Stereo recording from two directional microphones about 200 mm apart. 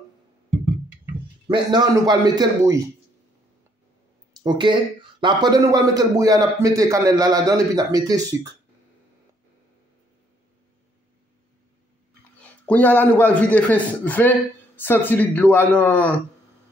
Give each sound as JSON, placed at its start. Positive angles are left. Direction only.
{"t": 1.5, "sound": "a man's voice", "side_deg": -20}
{"t": 4.4, "sound": "a man's voice", "side_deg": -20}
{"t": 12.4, "sound": "a man's voice", "side_deg": 5}